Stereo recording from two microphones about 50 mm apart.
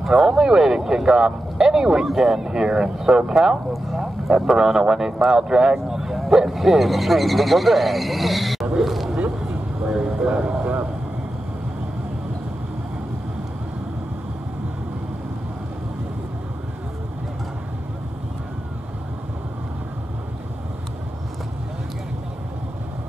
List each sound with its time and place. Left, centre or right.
0.3 s speech: centre
9.8 s vehicle: right